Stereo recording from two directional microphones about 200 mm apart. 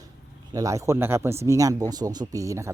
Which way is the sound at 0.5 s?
15° right (ahead or behind).